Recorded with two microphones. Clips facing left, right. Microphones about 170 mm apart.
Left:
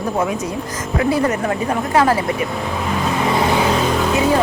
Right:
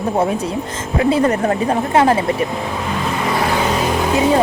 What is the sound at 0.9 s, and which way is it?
Speech, 30° right (ahead or behind).